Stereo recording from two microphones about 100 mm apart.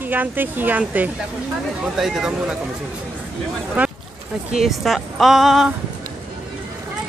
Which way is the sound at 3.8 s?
15° right (ahead or behind).